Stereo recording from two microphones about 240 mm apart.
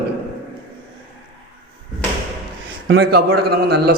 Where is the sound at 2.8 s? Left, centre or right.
Right.